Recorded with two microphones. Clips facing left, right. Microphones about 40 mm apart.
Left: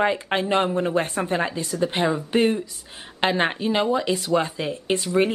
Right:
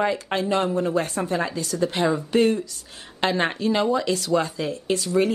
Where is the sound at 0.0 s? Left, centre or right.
Left.